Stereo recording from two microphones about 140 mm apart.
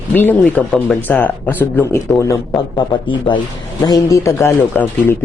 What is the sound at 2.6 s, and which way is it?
A man's voice, 35° left (ahead or behind).